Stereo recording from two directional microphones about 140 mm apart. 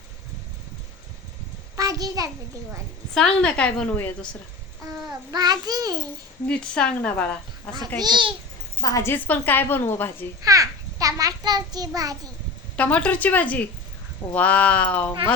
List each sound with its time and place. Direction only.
1.7 s a sound: 25° right (ahead or behind)
3.2 s a woman's voice: 5° left (ahead or behind)
5.3 s a child's voice: 30° right (ahead or behind)
6.5 s a woman's voice: 5° left (ahead or behind)
7.9 s a child's voice: 30° right (ahead or behind)
8.8 s a woman's voice: 25° left (ahead or behind)
9.1 s a woman's voice: 10° left (ahead or behind)
10.4 s a child's voice: 25° right (ahead or behind)
12.7 s a woman's voice: 10° left (ahead or behind)